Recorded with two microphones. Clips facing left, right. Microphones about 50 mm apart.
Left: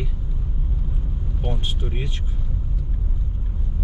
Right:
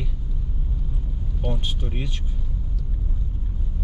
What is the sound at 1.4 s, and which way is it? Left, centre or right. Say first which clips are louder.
Speech: even; centre.